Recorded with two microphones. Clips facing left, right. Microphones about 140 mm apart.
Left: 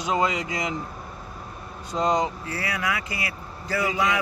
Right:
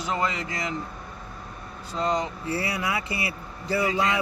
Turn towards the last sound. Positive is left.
turn(degrees=-25)  # may be behind; listen again after turning